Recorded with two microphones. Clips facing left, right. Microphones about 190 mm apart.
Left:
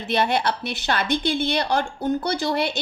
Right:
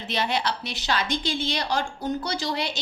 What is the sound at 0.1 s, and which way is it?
A woman's voice, 55° left (ahead or behind).